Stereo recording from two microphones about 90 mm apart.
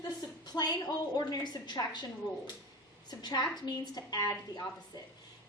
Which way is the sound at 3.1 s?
50° left (ahead or behind).